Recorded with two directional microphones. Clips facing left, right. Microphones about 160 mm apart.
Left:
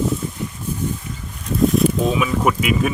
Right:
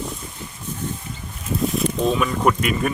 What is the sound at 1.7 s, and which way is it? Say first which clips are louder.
Speech: left 4 dB; centre (ahead or behind).